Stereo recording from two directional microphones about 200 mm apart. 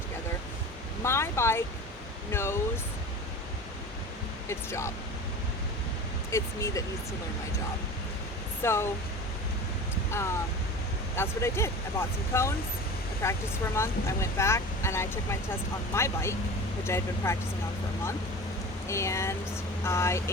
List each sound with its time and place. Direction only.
1.0 s speech: 15° left (ahead or behind)
4.4 s speech: 15° left (ahead or behind)
6.3 s speech: 15° left (ahead or behind)
8.6 s speech: 10° left (ahead or behind)
11.1 s speech: 15° left (ahead or behind)
18.9 s speech: 15° left (ahead or behind)